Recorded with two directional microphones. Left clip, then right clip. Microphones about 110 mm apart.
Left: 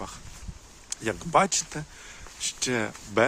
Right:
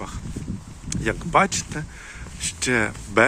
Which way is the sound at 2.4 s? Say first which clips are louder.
Right 6 dB; 15° left (ahead or behind).